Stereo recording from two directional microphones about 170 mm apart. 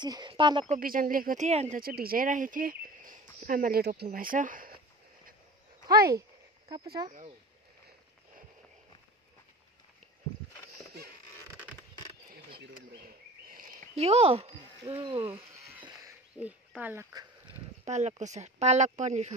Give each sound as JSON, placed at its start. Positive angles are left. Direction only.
{"t": 0.0, "sound": "a woman's voice", "side_deg": -25}
{"t": 0.7, "sound": "speech", "side_deg": -55}
{"t": 1.8, "sound": "speech", "side_deg": -60}
{"t": 7.1, "sound": "speech", "side_deg": -40}
{"t": 12.3, "sound": "a sound", "side_deg": -60}
{"t": 13.9, "sound": "speech", "side_deg": -35}
{"t": 15.8, "sound": "a sound", "side_deg": -20}
{"t": 16.3, "sound": "speech", "side_deg": -10}
{"t": 17.8, "sound": "speech", "side_deg": -40}